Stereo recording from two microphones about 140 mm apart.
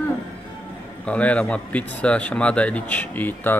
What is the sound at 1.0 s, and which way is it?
A man's voice, 10° left (ahead or behind).